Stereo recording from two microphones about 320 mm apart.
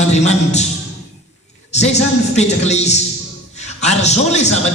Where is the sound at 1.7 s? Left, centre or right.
Left.